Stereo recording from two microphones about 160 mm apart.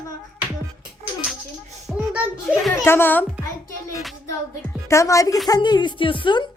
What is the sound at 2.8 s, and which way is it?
Speech, 15° left (ahead or behind).